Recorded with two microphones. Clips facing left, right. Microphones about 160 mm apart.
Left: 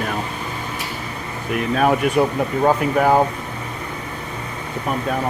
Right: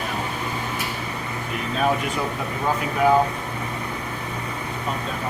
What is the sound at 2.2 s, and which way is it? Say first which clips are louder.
Speech: left 9 dB; 60° left (ahead or behind).